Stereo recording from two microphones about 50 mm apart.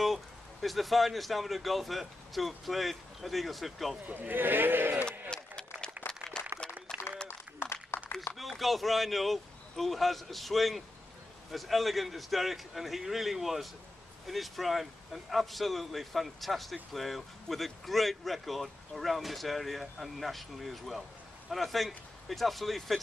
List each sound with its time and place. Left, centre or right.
0.0 s speech: centre
4.0 s speech: right
5.3 s run: centre
6.0 s a sound: left
6.9 s applause: centre
7.6 s a sound: left
8.4 s speech: centre